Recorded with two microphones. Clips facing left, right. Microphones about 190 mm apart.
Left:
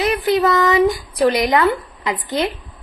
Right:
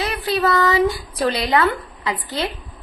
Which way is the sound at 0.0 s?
20° left (ahead or behind).